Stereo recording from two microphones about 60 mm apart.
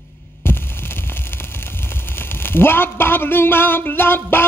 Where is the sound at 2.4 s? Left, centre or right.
Left.